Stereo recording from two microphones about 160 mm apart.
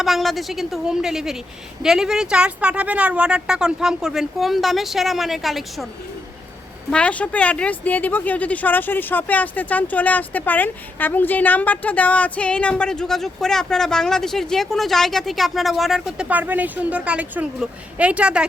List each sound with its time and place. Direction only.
0.0 s speech: centre (ahead or behind)
6.9 s speech: 10° left (ahead or behind)